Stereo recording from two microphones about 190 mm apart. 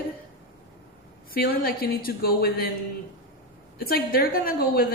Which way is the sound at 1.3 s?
50° left (ahead or behind).